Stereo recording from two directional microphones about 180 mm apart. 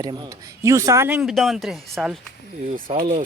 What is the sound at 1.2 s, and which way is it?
A man's voice, centre (ahead or behind).